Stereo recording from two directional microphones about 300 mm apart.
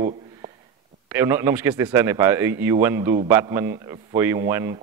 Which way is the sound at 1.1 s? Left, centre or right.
Centre.